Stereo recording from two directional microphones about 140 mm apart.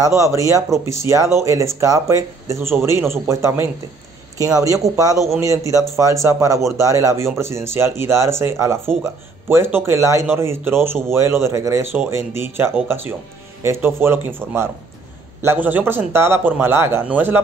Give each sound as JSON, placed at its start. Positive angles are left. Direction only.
{"t": 0.0, "sound": "speech", "side_deg": -20}